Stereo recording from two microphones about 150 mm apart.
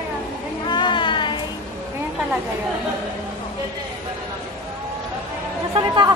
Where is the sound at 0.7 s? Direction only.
30° left (ahead or behind).